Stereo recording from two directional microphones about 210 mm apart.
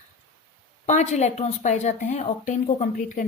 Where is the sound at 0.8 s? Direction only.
35° left (ahead or behind).